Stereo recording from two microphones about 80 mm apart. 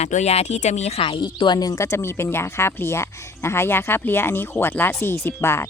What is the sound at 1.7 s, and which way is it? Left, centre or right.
Speech, left.